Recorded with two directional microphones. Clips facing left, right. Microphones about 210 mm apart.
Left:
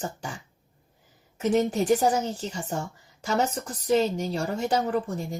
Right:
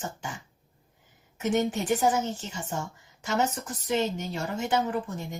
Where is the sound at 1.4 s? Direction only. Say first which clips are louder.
Left 3 dB; 35° left (ahead or behind).